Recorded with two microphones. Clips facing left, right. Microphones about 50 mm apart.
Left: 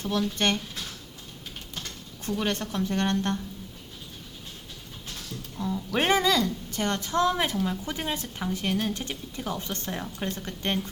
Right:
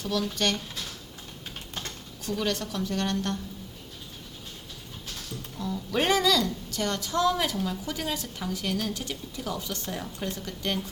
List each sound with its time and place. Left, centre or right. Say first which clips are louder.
0.0 s a woman's voice: left 1 dB; left
2.2 s a woman's voice: left 1 dB; left
5.5 s a woman's voice: left 1 dB; centre